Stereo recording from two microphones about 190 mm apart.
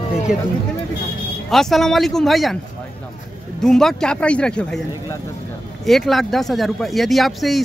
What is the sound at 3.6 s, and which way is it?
Speech, centre (ahead or behind).